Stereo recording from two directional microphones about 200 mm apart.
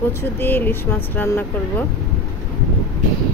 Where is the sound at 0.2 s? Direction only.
10° left (ahead or behind).